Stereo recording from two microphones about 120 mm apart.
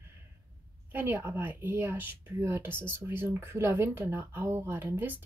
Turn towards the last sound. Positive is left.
turn(degrees=-20)  # may be behind; listen again after turning